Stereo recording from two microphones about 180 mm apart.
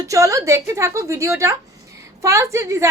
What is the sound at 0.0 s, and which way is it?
A woman's voice, 20° right (ahead or behind).